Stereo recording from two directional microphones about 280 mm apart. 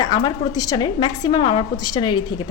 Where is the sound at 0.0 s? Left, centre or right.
Centre.